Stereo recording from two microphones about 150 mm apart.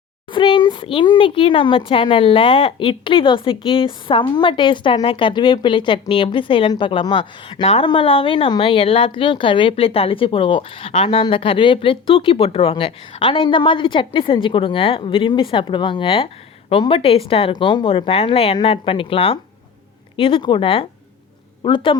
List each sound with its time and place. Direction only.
0.3 s speech: 35° left (ahead or behind)